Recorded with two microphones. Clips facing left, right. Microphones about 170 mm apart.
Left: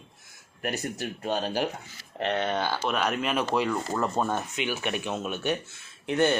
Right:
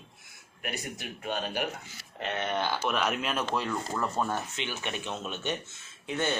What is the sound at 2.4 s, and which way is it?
Speech, 20° left (ahead or behind).